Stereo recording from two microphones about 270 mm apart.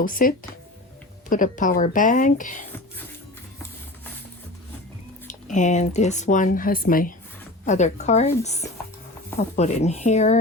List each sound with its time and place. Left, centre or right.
0.0 s speech: left
5.5 s speech: left